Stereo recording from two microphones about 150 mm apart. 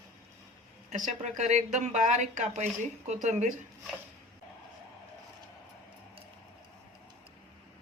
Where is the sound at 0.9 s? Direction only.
55° right (ahead or behind).